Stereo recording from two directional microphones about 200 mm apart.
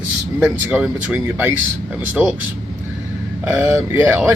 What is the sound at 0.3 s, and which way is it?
Speech, 5° right (ahead or behind).